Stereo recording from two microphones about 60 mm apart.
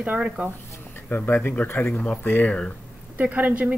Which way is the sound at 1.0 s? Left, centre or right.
Left.